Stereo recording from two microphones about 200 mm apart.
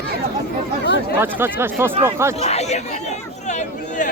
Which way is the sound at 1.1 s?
10° right (ahead or behind).